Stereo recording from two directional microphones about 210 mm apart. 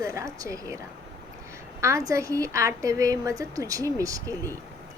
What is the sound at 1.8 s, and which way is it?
A woman's voice, 15° right (ahead or behind).